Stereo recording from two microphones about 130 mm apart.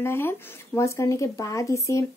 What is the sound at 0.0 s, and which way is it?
Speech, 20° left (ahead or behind).